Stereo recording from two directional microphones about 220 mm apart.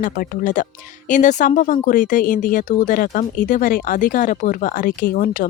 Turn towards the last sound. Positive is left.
turn(degrees=40)  # may be behind; listen again after turning